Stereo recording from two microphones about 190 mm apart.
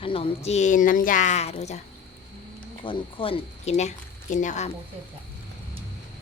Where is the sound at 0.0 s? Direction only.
30° left (ahead or behind).